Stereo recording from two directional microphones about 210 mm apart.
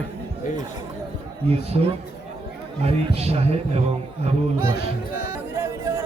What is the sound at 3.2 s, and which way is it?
Speech, 30° right (ahead or behind).